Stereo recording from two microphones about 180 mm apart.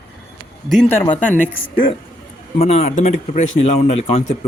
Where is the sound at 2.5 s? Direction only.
40° left (ahead or behind).